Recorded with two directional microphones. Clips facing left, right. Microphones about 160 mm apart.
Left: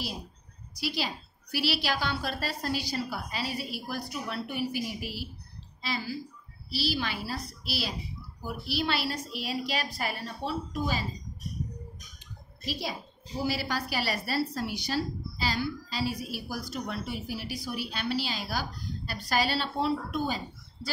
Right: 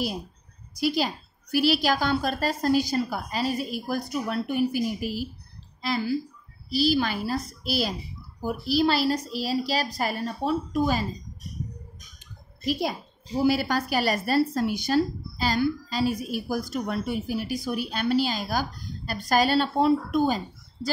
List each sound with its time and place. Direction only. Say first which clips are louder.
0.7 s a woman's voice: right 8 dB; 45° right (ahead or behind)
6.7 s a woman's voice: right 8 dB; 45° right (ahead or behind)
13.5 s a woman's voice: right 7 dB; 50° right (ahead or behind)